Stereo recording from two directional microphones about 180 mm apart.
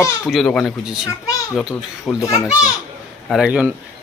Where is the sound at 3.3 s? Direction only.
5° right (ahead or behind).